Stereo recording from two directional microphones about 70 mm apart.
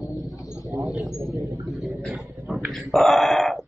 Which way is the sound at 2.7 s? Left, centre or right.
Centre.